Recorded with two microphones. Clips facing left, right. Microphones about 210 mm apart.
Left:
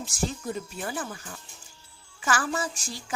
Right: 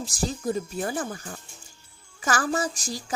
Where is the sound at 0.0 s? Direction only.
35° right (ahead or behind).